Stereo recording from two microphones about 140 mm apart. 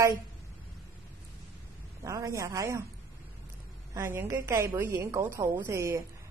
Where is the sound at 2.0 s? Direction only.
25° right (ahead or behind).